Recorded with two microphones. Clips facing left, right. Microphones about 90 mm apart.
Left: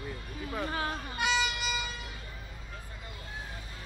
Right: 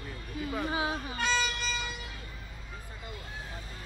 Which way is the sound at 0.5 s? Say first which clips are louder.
Right 1 dB; 10° right (ahead or behind).